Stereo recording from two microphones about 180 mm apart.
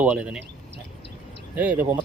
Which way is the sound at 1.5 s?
10° right (ahead or behind).